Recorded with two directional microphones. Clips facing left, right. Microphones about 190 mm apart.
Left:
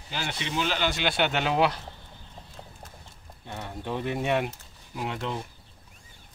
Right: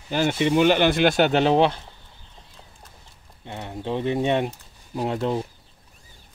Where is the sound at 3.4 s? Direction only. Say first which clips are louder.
Right 5 dB; 20° right (ahead or behind).